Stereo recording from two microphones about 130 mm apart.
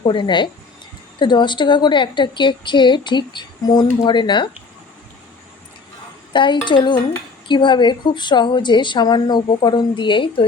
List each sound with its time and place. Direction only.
0.0 s a woman's voice: 40° left (ahead or behind)
6.3 s a woman's voice: 35° left (ahead or behind)